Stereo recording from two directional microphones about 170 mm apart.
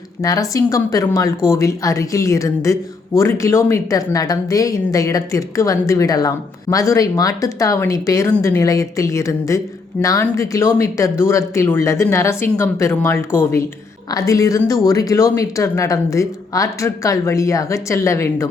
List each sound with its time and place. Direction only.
0.2 s a woman's voice: 20° left (ahead or behind)